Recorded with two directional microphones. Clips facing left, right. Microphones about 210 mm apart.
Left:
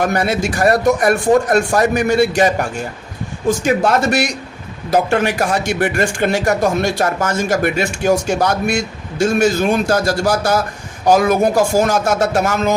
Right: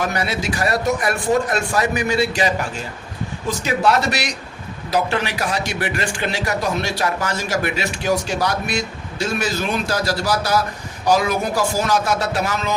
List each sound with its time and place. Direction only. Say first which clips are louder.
0.0 s a man's voice: left 6 dB; 50° left (ahead or behind)